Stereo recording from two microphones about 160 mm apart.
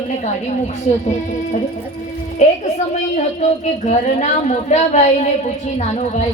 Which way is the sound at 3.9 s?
45° left (ahead or behind).